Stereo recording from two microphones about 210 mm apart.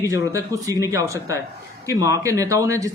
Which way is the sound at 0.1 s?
15° right (ahead or behind).